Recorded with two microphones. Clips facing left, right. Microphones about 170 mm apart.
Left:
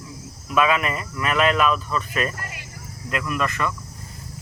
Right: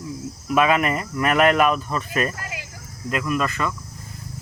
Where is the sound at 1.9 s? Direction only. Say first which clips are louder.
Right 1 dB; 40° right (ahead or behind).